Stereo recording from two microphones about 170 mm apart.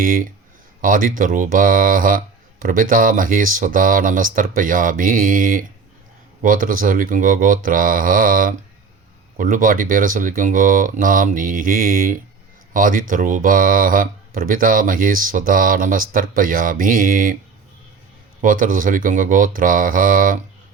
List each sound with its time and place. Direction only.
0.0 s speech: 55° right (ahead or behind)
18.4 s speech: 50° right (ahead or behind)